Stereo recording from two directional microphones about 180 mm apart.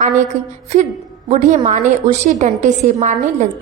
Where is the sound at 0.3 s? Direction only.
40° right (ahead or behind).